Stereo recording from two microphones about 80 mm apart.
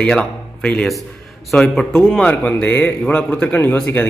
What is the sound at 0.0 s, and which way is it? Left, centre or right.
A man's voice, centre.